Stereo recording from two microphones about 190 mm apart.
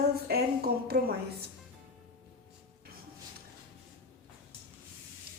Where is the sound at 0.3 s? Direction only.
55° right (ahead or behind).